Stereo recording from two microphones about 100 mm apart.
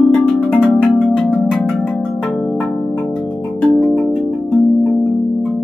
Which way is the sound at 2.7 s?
10° left (ahead or behind).